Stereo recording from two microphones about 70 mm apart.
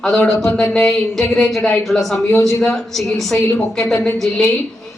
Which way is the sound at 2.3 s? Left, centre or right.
Left.